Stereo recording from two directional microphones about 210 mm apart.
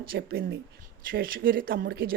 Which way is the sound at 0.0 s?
45° right (ahead or behind).